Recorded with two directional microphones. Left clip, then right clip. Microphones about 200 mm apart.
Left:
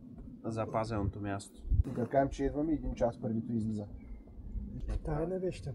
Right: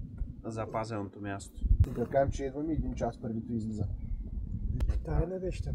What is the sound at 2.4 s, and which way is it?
Speech, 25° left (ahead or behind).